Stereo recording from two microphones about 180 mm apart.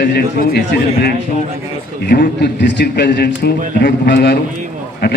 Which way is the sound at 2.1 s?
50° left (ahead or behind).